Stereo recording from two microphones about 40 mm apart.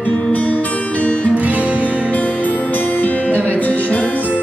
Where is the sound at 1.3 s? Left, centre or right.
Right.